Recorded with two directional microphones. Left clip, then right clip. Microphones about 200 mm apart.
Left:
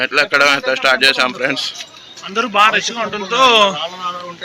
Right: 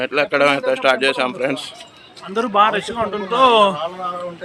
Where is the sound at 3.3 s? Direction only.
20° right (ahead or behind).